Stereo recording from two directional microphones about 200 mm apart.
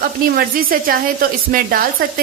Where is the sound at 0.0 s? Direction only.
45° right (ahead or behind).